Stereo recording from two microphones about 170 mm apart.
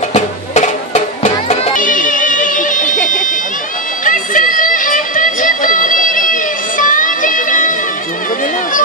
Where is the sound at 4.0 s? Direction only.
50° left (ahead or behind).